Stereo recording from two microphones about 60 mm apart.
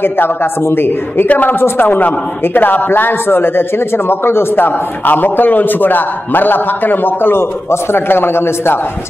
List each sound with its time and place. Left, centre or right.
0.0 s a man's voice: left